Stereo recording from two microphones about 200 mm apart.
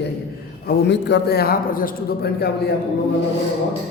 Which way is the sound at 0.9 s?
60° left (ahead or behind).